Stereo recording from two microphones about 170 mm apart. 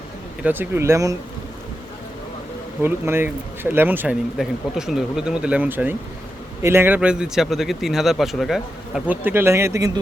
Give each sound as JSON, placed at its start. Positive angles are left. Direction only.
{"t": 0.4, "sound": "speech", "side_deg": -10}
{"t": 2.8, "sound": "speech", "side_deg": -15}
{"t": 9.0, "sound": "speech", "side_deg": -10}